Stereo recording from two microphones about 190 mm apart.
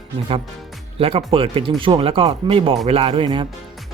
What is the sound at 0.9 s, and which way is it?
Speech, 30° right (ahead or behind).